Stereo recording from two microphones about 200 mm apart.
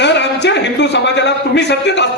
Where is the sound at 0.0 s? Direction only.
60° left (ahead or behind).